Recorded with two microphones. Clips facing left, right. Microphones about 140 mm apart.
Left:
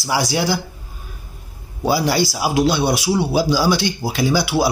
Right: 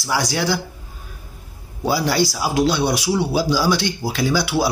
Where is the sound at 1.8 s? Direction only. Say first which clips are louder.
Left 1 dB; 10° left (ahead or behind).